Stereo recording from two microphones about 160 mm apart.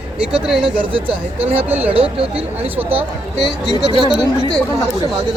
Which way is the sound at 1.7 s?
10° right (ahead or behind).